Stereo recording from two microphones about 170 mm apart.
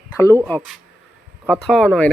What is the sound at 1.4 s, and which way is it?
Speech, centre (ahead or behind).